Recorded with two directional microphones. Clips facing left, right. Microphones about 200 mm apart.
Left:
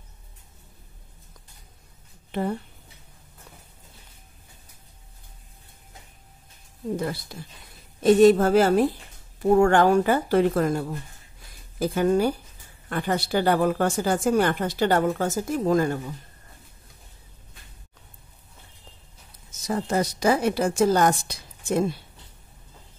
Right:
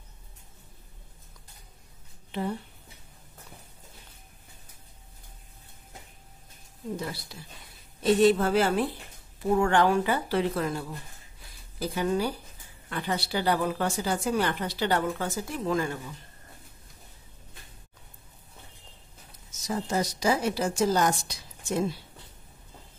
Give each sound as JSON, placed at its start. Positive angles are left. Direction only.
{"t": 7.0, "sound": "speech", "side_deg": 50}
{"t": 19.7, "sound": "a woman's voice", "side_deg": 60}